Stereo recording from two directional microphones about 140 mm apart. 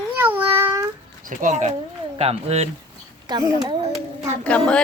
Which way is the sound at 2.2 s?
45° right (ahead or behind).